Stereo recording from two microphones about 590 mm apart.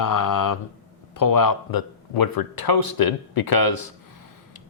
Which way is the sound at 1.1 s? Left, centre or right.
Left.